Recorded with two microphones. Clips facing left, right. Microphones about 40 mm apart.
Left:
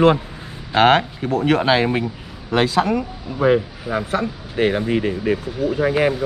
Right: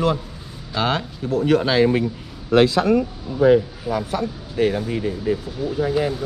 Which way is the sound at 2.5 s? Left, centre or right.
Centre.